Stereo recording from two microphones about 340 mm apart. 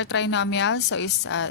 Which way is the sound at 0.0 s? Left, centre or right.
Left.